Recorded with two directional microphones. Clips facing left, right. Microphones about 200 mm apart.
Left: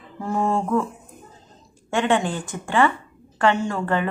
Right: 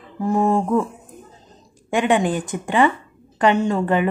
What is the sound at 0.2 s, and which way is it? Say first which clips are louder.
Speech: right 4 dB; 15° right (ahead or behind).